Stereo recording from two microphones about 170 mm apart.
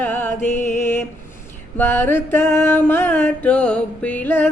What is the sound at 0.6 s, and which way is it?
Mantra, 15° left (ahead or behind).